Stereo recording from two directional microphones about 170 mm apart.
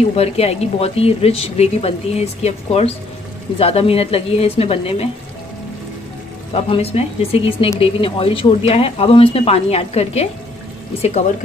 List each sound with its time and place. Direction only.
0.1 s speech: 35° left (ahead or behind)
6.5 s speech: 35° left (ahead or behind)